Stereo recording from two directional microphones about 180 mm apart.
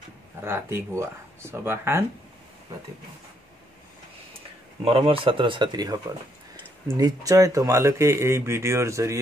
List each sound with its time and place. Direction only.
0.4 s speech: 15° right (ahead or behind)
4.8 s speech: 30° right (ahead or behind)